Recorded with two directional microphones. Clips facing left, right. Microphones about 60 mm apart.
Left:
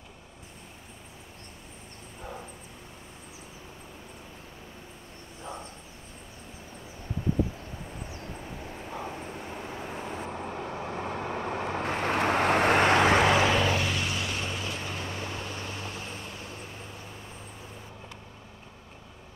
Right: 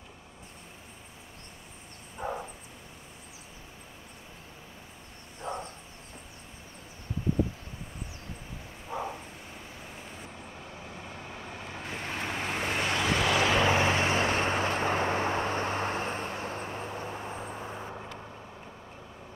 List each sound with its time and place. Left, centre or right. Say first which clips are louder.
2.2 s dog: right 7 dB; right
5.4 s a sound: right 4 dB; right
9.5 s vehicle: left 8 dB; left
13.3 s vehicle: left 3 dB; left
13.6 s vehicle: right 3 dB; right